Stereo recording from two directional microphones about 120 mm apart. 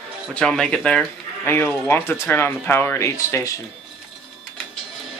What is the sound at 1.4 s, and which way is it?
Speech, 20° left (ahead or behind).